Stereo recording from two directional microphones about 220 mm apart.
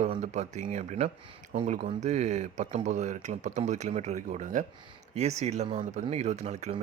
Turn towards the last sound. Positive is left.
turn(degrees=-30)  # may be behind; listen again after turning